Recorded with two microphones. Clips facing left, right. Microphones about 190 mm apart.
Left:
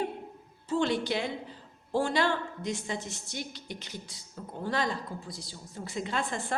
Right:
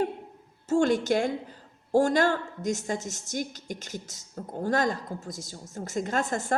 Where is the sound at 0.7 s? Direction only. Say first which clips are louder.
Right 5 dB; 45° right (ahead or behind).